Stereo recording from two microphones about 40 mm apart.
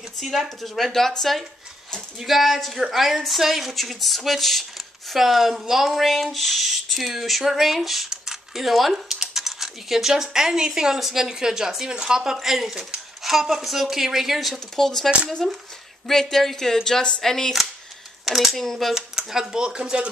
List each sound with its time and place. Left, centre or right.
0.2 s speech: centre
2.0 s speech: centre
5.1 s speech: centre
8.1 s a sound: centre
9.1 s speech: centre
12.4 s speech: centre
14.8 s speech: centre
18.2 s speech: centre
19.4 s speech: right